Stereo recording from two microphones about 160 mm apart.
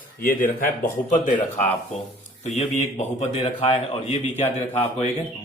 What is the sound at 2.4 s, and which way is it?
A man's voice, 45° left (ahead or behind).